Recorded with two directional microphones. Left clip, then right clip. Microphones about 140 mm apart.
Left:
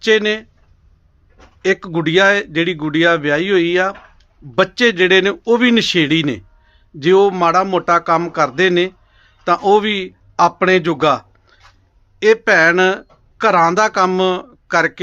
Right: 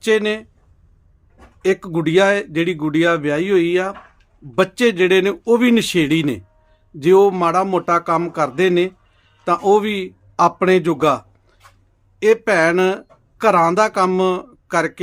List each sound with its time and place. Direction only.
0.0 s a man's voice: 15° right (ahead or behind)
1.6 s a man's voice: 15° right (ahead or behind)